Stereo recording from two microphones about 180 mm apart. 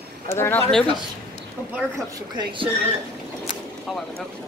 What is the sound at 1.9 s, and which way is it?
Speech, 25° right (ahead or behind).